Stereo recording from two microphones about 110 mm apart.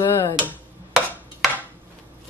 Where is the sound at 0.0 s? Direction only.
25° left (ahead or behind).